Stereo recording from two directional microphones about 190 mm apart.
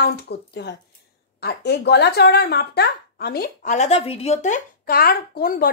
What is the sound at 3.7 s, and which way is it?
Speech, 35° left (ahead or behind).